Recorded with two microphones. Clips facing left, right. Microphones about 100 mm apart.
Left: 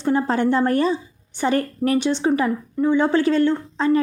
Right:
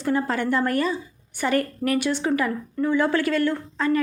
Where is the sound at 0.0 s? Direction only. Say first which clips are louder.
Left 4 dB; 25° left (ahead or behind).